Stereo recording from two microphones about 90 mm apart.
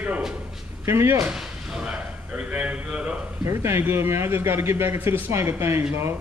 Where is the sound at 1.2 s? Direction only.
10° right (ahead or behind).